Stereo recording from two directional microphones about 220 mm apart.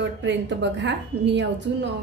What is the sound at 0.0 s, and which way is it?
A woman's voice, 50° right (ahead or behind).